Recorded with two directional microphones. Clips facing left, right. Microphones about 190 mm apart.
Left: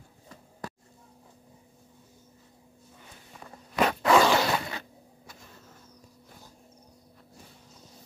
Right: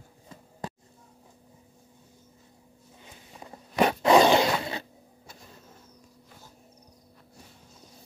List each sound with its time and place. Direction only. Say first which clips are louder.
3.3 s zipper: right 2 dB; 20° right (ahead or behind)